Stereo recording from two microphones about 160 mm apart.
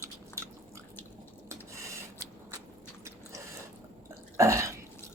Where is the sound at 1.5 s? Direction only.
20° right (ahead or behind).